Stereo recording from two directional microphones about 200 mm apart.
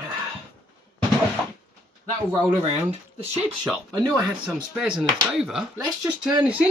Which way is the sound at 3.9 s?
20° right (ahead or behind).